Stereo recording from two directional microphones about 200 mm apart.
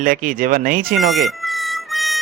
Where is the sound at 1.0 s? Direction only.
Centre (ahead or behind).